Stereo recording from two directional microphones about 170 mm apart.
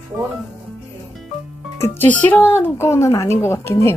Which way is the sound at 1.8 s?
10° left (ahead or behind).